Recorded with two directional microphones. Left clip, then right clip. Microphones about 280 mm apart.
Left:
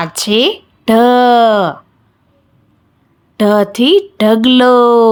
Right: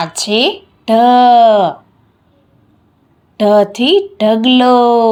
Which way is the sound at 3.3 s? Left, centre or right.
Left.